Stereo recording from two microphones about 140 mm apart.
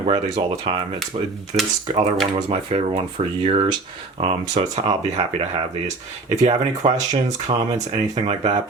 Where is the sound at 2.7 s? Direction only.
50° right (ahead or behind).